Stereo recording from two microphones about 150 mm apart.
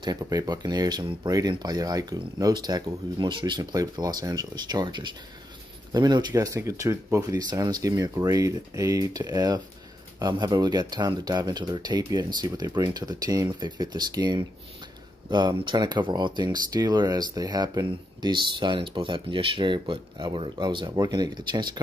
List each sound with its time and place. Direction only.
0.0 s speech: 25° right (ahead or behind)